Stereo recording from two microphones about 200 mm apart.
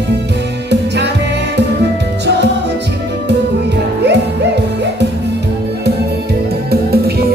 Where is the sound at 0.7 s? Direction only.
60° right (ahead or behind).